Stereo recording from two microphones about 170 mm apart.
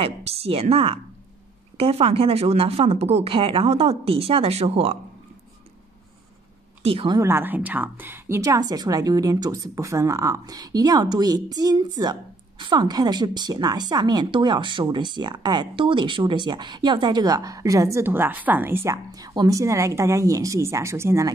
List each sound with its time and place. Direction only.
0.0 s speech: 35° right (ahead or behind)
6.8 s speech: 35° right (ahead or behind)
7.2 s a woman's voice: 15° right (ahead or behind)